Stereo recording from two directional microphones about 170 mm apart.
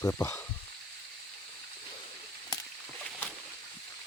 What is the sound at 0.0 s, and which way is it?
Speech, 15° left (ahead or behind).